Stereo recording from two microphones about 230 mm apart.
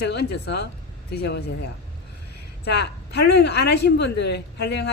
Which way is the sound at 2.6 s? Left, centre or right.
Left.